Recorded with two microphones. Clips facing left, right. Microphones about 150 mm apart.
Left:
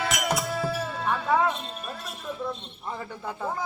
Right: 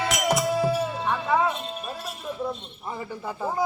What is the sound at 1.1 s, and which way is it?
Music, centre (ahead or behind).